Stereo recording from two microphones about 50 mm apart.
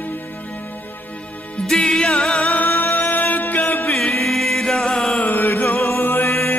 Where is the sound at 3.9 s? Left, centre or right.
Centre.